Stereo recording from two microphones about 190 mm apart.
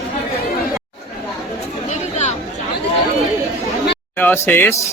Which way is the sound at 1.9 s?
35° left (ahead or behind).